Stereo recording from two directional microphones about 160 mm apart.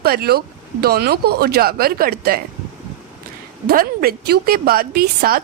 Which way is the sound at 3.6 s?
70° right (ahead or behind).